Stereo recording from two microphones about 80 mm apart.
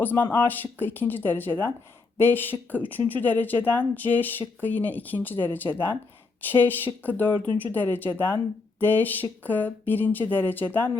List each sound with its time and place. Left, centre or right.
0.0 s speech: left